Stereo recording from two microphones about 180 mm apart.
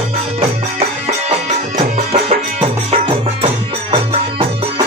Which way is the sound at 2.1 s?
35° right (ahead or behind).